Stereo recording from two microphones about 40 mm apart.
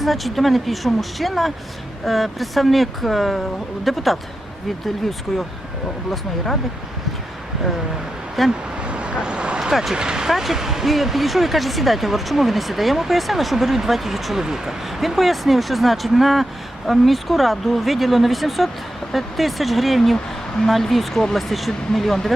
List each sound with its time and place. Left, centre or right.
0.0 s speech: centre
5.3 s speech: centre
8.4 s speech: centre
8.8 s vehicle: right
9.9 s speech: centre